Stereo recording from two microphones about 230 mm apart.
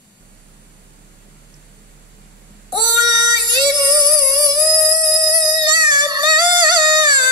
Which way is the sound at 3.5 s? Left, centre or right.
Centre.